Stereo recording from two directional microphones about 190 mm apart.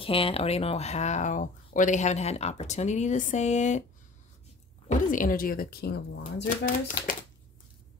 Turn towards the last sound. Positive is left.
turn(degrees=45)  # may be behind; listen again after turning